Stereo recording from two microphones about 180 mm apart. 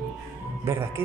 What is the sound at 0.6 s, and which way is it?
Speech, 15° right (ahead or behind).